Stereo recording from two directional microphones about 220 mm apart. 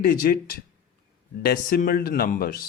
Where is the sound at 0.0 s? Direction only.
40° left (ahead or behind).